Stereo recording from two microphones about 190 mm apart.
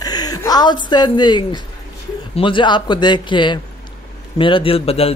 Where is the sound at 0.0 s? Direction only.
20° left (ahead or behind).